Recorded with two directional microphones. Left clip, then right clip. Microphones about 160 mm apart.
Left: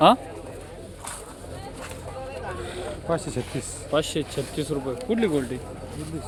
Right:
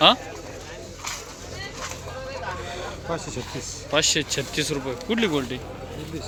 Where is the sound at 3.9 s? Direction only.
20° left (ahead or behind).